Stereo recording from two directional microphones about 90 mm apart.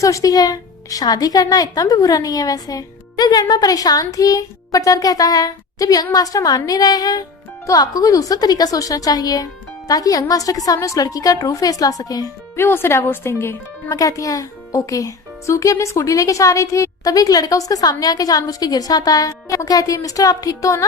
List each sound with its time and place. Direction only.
0.0 s a woman's voice: 40° left (ahead or behind)
12.5 s speech: 25° left (ahead or behind)
14.0 s speech: 40° left (ahead or behind)